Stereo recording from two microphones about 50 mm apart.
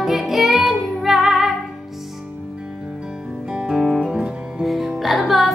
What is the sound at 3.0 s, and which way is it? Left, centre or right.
Music, centre.